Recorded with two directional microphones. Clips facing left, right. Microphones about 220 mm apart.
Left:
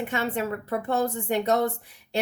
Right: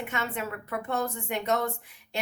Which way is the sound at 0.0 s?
35° left (ahead or behind).